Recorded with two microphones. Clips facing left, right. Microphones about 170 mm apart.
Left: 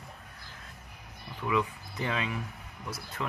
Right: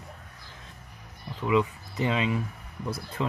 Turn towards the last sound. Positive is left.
turn(degrees=-20)  # may be behind; listen again after turning